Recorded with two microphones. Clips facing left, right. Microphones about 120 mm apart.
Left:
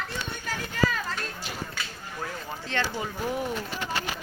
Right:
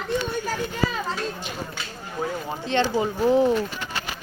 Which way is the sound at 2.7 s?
20° right (ahead or behind).